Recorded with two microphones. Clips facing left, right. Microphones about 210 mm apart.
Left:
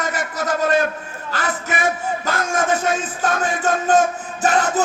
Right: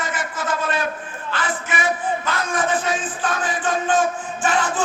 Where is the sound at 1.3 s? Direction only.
40° left (ahead or behind).